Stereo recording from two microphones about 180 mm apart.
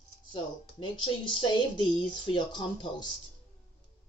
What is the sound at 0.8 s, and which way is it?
Speech, 25° left (ahead or behind).